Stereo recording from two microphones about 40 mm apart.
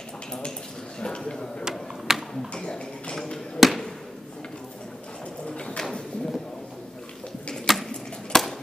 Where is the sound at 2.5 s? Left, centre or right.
Left.